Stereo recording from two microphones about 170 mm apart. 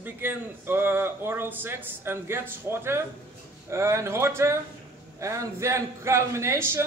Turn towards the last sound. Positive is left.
turn(degrees=-15)  # may be behind; listen again after turning